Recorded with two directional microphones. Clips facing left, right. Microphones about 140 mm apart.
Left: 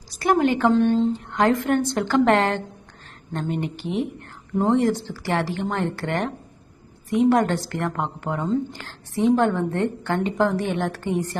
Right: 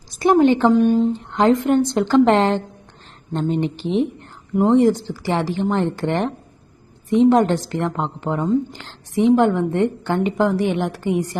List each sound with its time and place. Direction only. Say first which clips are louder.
0.2 s a woman's voice: right 5 dB; 20° right (ahead or behind)
4.5 s a woman's voice: right 5 dB; 10° right (ahead or behind)